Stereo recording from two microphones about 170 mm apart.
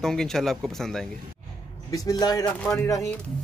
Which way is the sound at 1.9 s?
20° left (ahead or behind).